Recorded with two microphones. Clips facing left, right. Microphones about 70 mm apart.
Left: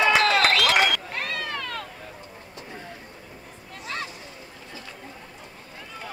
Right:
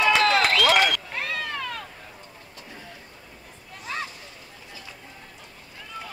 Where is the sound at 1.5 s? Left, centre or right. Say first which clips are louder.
Even; centre.